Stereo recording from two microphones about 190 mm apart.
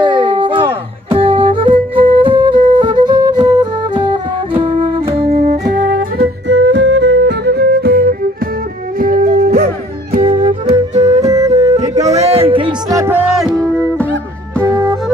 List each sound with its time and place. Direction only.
0.0 s music: 25° right (ahead or behind)
5.3 s music: 50° right (ahead or behind)
6.5 s music: 70° right (ahead or behind); by 9.7 s 50° right (ahead or behind)
10.2 s music: 30° right (ahead or behind)
11.2 s music: 15° right (ahead or behind)
11.7 s music: 35° right (ahead or behind)
12.9 s music: 15° right (ahead or behind)
13.4 s music: 5° left (ahead or behind)
14.6 s music: 15° right (ahead or behind)